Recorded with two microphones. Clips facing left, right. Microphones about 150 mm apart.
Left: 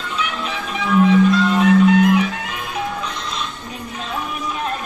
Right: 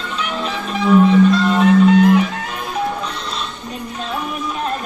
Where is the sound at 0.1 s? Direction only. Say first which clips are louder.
Right 2 dB; 35° right (ahead or behind).